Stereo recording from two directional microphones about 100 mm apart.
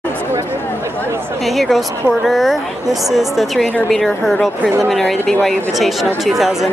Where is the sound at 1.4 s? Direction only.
Centre (ahead or behind).